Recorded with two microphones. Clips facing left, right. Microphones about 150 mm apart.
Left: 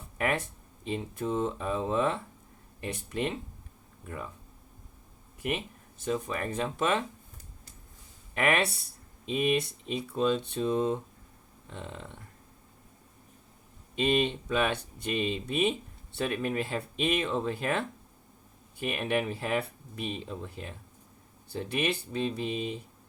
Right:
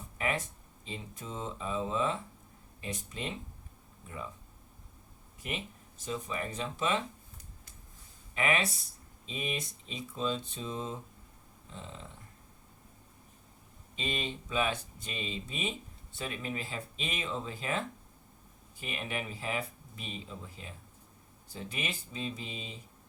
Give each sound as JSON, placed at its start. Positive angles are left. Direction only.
{"t": 0.2, "sound": "a sound", "side_deg": 60}
{"t": 0.9, "sound": "speech", "side_deg": 60}
{"t": 5.4, "sound": "speech", "side_deg": 60}
{"t": 8.4, "sound": "speech", "side_deg": 60}
{"t": 13.9, "sound": "speech", "side_deg": 60}